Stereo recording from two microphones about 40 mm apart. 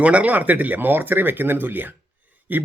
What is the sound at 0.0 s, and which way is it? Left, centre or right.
Speech, right.